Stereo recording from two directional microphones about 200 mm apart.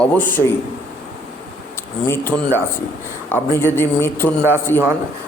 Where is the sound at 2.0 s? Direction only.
10° left (ahead or behind).